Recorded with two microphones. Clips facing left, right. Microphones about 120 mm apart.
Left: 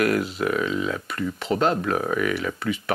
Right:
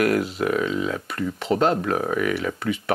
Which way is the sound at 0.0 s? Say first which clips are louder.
Right 1 dB; 40° right (ahead or behind).